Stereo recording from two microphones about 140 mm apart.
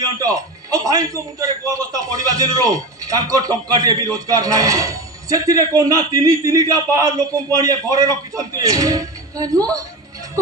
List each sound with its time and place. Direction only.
0.2 s a man's voice: 25° right (ahead or behind)